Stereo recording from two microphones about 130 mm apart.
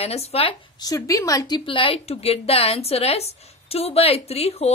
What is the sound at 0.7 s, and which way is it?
Speech, 25° left (ahead or behind).